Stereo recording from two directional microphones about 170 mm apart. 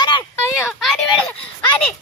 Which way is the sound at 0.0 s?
25° left (ahead or behind).